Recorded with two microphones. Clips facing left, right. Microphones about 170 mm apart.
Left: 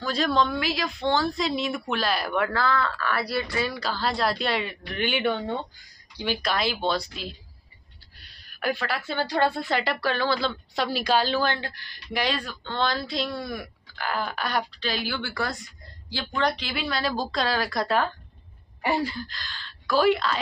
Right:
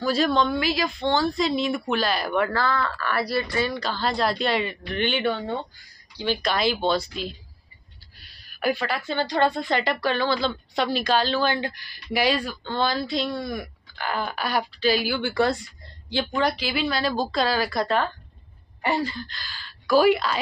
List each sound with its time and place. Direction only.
0.0 s a woman's voice: 5° right (ahead or behind); by 6.4 s 10° left (ahead or behind)
6.4 s a woman's voice: centre (ahead or behind)
11.4 s a woman's voice: 15° right (ahead or behind)
15.3 s speech: 25° right (ahead or behind)
16.3 s a woman's voice: 5° right (ahead or behind)